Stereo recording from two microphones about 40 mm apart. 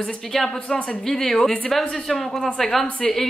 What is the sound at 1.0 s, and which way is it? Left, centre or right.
A woman's voice, centre.